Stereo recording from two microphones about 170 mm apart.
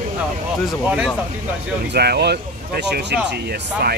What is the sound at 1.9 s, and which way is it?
Speech, 70° right (ahead or behind).